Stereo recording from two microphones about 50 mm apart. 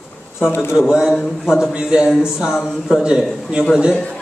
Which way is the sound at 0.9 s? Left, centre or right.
Centre.